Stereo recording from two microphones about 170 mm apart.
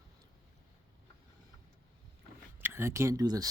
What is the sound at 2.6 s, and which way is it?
Speech, 15° right (ahead or behind).